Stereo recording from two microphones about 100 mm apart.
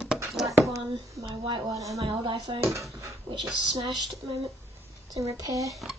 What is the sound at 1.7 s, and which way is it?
Speech, 35° right (ahead or behind).